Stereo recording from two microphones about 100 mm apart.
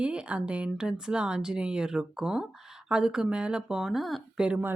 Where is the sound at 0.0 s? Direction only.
10° right (ahead or behind).